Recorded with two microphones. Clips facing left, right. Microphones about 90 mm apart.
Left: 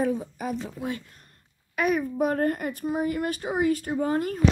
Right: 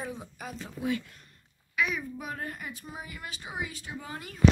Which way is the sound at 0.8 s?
40° left (ahead or behind).